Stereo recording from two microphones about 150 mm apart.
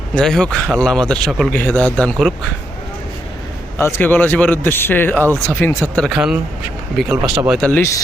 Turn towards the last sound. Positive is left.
turn(degrees=5)  # may be behind; listen again after turning